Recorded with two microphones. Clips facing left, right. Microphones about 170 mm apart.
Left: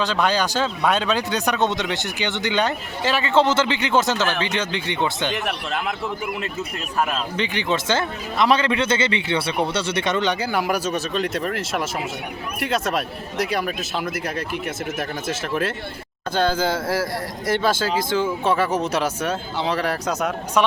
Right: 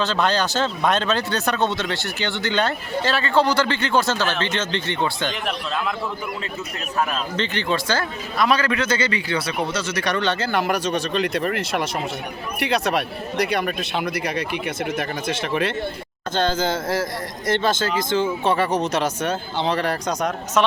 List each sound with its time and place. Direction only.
0.0 s speech: 10° left (ahead or behind)
7.3 s a man's voice: 15° left (ahead or behind)